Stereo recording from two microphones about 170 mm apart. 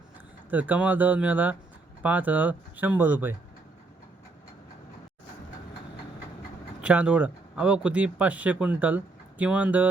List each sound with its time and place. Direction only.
0.5 s speech: 10° right (ahead or behind)
6.8 s speech: 10° right (ahead or behind)